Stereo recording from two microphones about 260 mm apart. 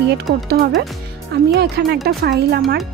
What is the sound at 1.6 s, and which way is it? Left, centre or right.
Speech, right.